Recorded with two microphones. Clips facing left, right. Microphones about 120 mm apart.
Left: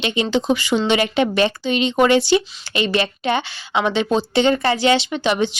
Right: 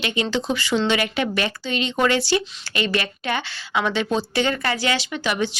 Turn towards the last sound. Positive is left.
turn(degrees=20)  # may be behind; listen again after turning